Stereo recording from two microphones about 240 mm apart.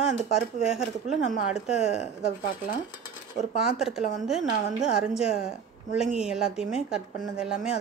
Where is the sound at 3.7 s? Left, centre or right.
Centre.